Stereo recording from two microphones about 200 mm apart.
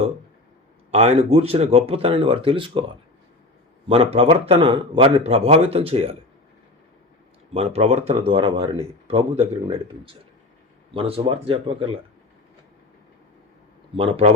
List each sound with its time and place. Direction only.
0.9 s speech: 30° right (ahead or behind)
3.8 s speech: 30° right (ahead or behind)
7.5 s speech: 30° right (ahead or behind)
10.9 s speech: 25° right (ahead or behind)
13.9 s speech: 25° right (ahead or behind)